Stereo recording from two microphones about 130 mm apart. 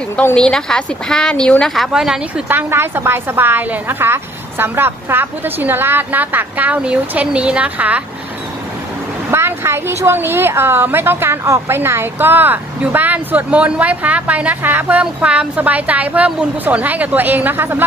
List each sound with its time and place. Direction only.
0.2 s a woman's voice: 10° left (ahead or behind); by 8.0 s 10° right (ahead or behind)
9.3 s a woman's voice: 20° right (ahead or behind)